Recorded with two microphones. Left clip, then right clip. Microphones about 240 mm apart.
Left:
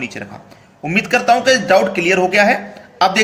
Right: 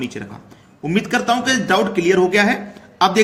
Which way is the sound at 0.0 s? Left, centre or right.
Centre.